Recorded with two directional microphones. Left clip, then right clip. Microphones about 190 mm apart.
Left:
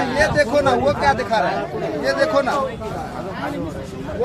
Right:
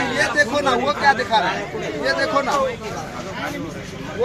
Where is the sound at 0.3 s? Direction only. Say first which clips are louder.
Even; 20° left (ahead or behind).